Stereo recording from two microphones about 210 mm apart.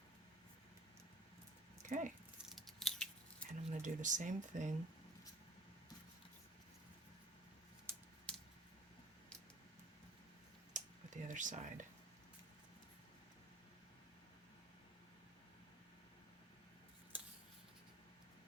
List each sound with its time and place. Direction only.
1.9 s speech: 35° right (ahead or behind)
2.5 s scissors: centre (ahead or behind)
3.7 s speech: 35° right (ahead or behind)
8.3 s a sound: 5° left (ahead or behind)
10.8 s a sound: 35° right (ahead or behind)
17.1 s scissors: 10° right (ahead or behind)